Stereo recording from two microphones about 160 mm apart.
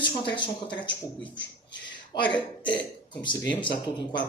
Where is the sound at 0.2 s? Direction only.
30° left (ahead or behind).